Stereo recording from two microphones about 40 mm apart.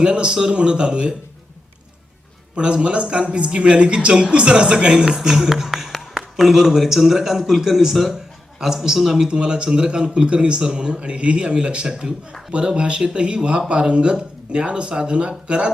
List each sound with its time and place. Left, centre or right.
0.0 s speech: right
2.6 s speech: right